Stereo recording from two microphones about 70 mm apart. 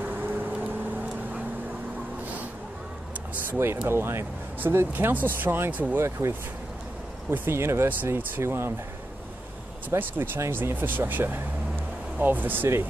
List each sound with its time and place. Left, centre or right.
0.0 s vehicle: right
3.4 s speech: right
6.0 s speech: right
9.8 s speech: right